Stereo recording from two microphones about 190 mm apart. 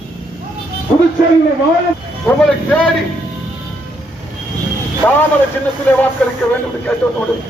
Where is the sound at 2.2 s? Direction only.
5° left (ahead or behind).